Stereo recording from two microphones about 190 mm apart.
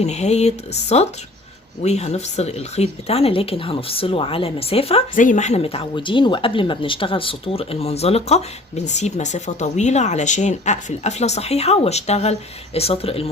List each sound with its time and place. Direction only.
0.0 s speech: 35° left (ahead or behind)
5.1 s speech: 40° left (ahead or behind)